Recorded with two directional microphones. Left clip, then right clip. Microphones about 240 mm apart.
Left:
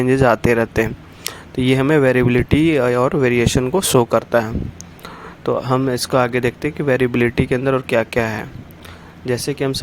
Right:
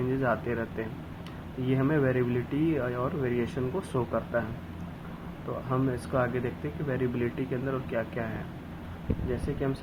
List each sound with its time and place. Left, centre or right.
0.2 s speech: left
5.5 s speech: left